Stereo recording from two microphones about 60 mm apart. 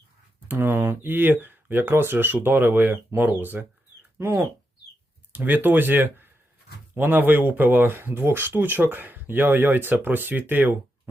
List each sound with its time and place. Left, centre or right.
0.5 s speech: right
4.2 s speech: right
5.3 s speech: right